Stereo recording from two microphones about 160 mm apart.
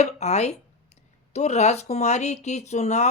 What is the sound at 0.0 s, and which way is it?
Speech, 45° left (ahead or behind).